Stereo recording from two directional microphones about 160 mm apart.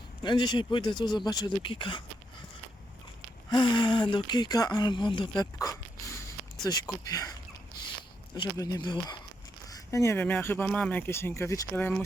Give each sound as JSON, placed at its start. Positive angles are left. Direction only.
{"t": 0.2, "sound": "speech", "side_deg": 30}
{"t": 3.5, "sound": "speech", "side_deg": 30}
{"t": 8.4, "sound": "speech", "side_deg": 25}